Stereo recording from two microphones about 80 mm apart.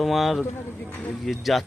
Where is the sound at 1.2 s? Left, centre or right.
Centre.